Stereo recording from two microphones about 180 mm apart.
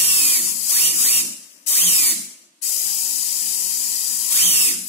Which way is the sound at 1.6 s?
35° left (ahead or behind).